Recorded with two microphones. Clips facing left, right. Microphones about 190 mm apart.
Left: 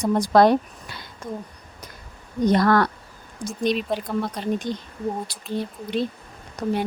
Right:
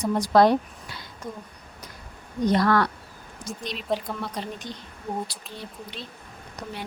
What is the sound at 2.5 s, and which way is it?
Speech, 45° left (ahead or behind).